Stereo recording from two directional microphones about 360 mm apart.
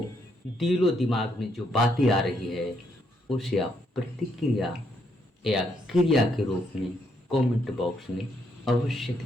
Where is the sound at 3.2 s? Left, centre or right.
Centre.